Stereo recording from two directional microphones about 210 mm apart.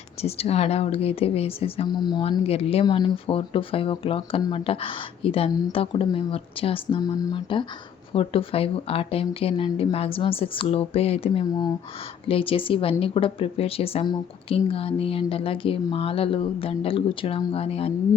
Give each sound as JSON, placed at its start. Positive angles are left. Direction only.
{"t": 0.2, "sound": "speech", "side_deg": 30}